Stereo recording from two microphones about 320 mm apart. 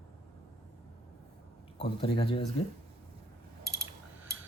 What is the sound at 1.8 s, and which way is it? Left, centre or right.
Speech, centre.